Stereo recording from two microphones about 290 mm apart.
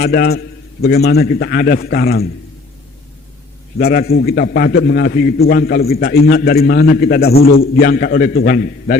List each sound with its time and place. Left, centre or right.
0.0 s a man's voice: left
3.8 s a man's voice: left